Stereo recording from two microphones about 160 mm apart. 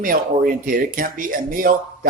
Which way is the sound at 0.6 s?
60° right (ahead or behind).